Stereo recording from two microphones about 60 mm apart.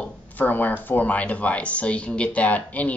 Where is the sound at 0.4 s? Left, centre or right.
Left.